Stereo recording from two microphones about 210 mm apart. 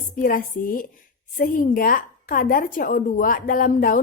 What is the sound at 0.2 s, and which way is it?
A woman's voice, 40° left (ahead or behind).